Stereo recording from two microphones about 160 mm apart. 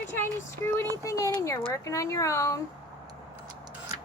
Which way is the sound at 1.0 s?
20° left (ahead or behind).